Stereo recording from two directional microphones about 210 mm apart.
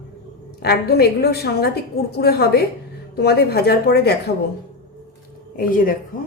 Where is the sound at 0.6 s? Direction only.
50° left (ahead or behind).